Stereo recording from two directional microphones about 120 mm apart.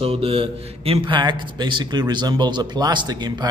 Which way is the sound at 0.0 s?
55° right (ahead or behind).